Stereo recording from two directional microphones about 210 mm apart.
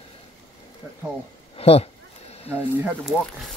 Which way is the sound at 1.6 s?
30° left (ahead or behind).